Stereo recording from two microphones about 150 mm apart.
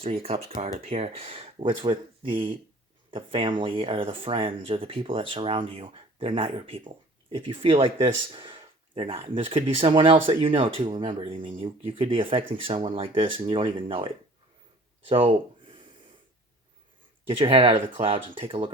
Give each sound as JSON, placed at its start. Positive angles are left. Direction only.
{"t": 0.0, "sound": "speech", "side_deg": -40}
{"t": 17.3, "sound": "speech", "side_deg": -35}